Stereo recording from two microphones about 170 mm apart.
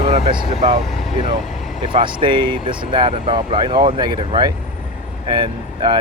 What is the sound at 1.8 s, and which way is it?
Speech, 30° right (ahead or behind).